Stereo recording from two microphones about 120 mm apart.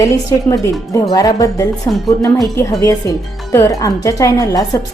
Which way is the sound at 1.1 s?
30° left (ahead or behind).